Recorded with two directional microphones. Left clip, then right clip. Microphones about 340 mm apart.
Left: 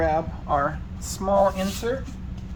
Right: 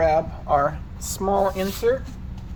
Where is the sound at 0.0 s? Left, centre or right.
Right.